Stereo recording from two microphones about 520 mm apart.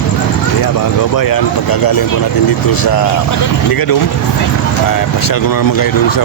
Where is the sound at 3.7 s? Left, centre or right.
Left.